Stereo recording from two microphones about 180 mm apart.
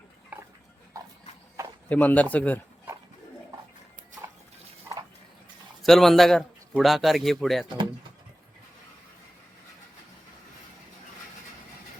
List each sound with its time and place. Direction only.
0.9 s clip-clop: 20° right (ahead or behind)
1.9 s speech: 10° left (ahead or behind)
5.8 s speech: centre (ahead or behind)